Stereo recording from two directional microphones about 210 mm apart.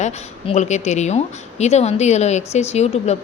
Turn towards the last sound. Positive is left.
turn(degrees=30)  # may be behind; listen again after turning